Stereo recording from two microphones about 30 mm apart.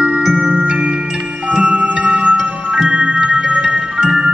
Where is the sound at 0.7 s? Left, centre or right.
Right.